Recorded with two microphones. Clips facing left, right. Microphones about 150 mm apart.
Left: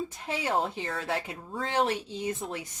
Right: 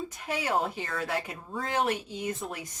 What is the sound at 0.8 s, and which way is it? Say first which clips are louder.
Speech: even; 30° left (ahead or behind).